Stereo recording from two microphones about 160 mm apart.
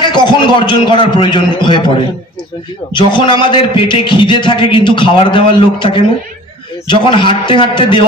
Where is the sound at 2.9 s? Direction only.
30° left (ahead or behind).